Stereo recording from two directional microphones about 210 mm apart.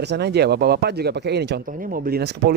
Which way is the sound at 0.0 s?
50° right (ahead or behind).